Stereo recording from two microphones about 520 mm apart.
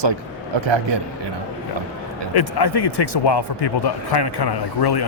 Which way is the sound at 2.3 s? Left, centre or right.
Left.